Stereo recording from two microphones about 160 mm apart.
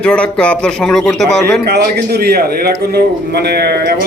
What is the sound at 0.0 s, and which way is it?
A man's voice, 5° left (ahead or behind).